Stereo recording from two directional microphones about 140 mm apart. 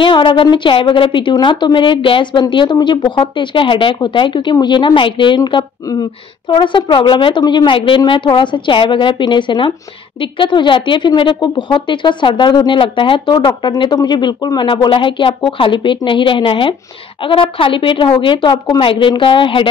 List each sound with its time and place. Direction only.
0.0 s speech: 35° left (ahead or behind)